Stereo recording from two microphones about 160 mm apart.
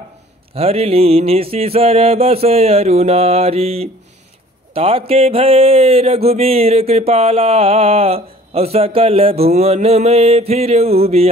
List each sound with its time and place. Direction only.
0.6 s speech: 40° right (ahead or behind)